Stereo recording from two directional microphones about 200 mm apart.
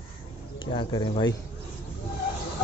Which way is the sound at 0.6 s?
25° left (ahead or behind).